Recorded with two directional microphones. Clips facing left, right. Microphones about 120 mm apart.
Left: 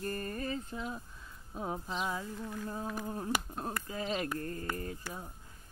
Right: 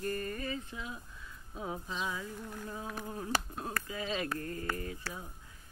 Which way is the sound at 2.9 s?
10° left (ahead or behind).